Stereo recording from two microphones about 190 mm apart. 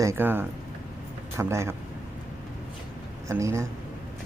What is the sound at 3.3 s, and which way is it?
Speech, 15° right (ahead or behind).